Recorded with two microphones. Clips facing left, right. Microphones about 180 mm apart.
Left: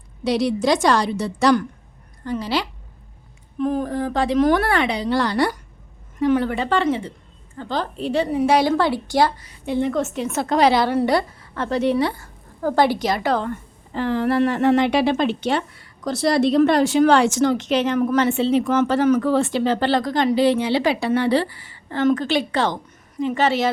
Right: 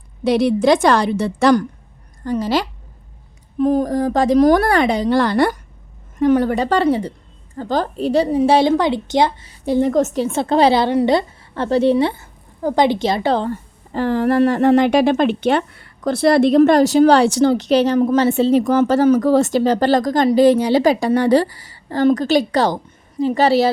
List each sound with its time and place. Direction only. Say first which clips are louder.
0.3 s a woman's voice: right 5 dB; 55° right (ahead or behind)
2.2 s a woman's voice: right 5 dB; 45° right (ahead or behind)